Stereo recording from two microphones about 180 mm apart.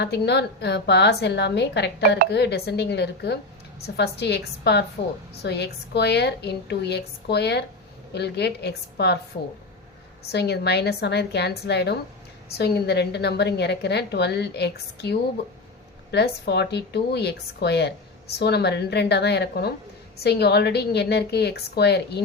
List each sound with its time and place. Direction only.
0.0 s speech: 70° left (ahead or behind)
10.3 s a woman's voice: 65° left (ahead or behind)